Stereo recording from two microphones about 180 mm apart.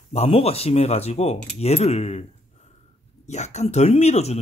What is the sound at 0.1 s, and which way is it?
Speech, 35° left (ahead or behind).